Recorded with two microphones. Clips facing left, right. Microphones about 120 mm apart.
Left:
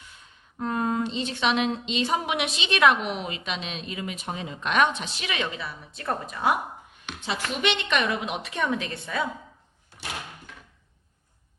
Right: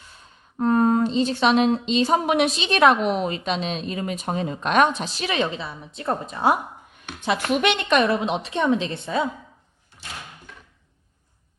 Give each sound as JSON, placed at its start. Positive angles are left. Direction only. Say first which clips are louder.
{"t": 0.6, "sound": "a woman's voice", "louder": "right 8 dB", "side_deg": -40}
{"t": 7.0, "sound": "a woman's voice", "louder": "right 7 dB", "side_deg": -50}